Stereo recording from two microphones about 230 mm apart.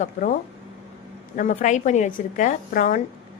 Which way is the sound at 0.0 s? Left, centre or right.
Left.